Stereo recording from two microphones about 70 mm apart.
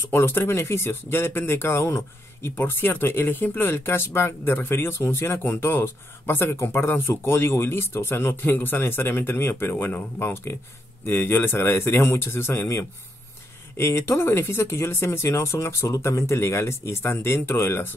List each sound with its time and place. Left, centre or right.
0.1 s speech: left